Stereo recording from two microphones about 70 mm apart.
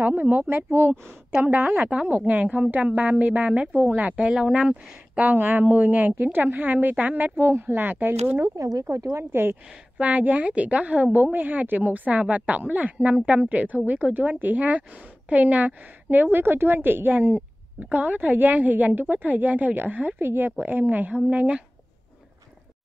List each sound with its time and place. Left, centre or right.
0.0 s speech: right
7.3 s speech: right
8.5 s speech: right
9.1 s speech: right
9.9 s speech: right